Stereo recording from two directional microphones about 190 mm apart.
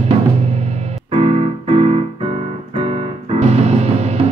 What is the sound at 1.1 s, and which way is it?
Keyboard, 30° right (ahead or behind).